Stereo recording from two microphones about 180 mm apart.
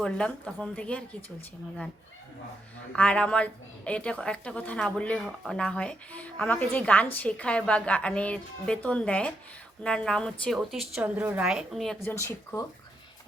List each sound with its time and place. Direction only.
0.0 s a woman's voice: 5° left (ahead or behind)
2.9 s a woman's voice: 5° left (ahead or behind)
12.0 s a woman's voice: 15° left (ahead or behind)